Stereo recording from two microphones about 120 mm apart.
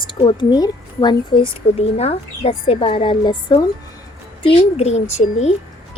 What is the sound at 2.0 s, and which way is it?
Speech, 60° left (ahead or behind).